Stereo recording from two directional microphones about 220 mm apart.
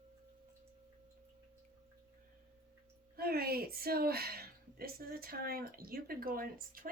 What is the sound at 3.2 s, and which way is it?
Speech, 45° right (ahead or behind).